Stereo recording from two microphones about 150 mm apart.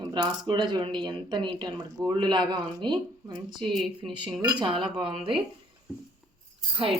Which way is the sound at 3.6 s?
Centre (ahead or behind).